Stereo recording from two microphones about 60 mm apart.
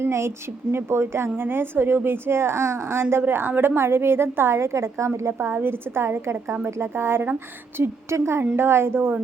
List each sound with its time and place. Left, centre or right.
0.0 s a woman's voice: right